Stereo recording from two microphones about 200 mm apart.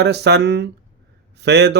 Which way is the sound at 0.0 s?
55° right (ahead or behind).